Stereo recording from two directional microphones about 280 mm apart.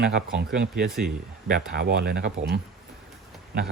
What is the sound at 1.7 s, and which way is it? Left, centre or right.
A man's voice, right.